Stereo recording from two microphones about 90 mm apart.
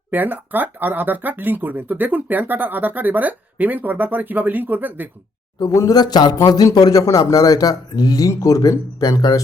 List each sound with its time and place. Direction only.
0.1 s speech: 20° right (ahead or behind)
5.5 s speech: 40° left (ahead or behind)